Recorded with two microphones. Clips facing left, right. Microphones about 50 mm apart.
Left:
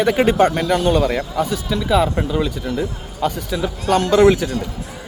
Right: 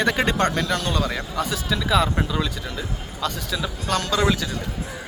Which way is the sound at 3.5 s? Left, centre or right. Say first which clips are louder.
Left 7 dB; left.